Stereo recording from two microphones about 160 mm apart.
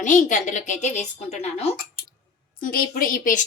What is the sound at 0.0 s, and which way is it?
A woman's voice, 50° left (ahead or behind).